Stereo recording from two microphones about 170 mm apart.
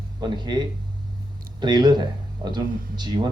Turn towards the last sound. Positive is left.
turn(degrees=-25)  # may be behind; listen again after turning